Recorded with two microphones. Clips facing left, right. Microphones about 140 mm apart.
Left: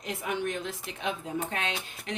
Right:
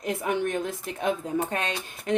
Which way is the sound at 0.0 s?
50° right (ahead or behind).